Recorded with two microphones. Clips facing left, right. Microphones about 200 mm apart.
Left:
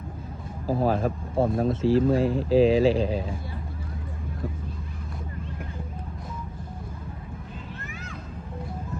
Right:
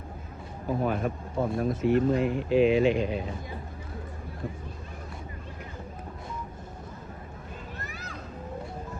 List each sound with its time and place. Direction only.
0.9 s speech: 30° left (ahead or behind)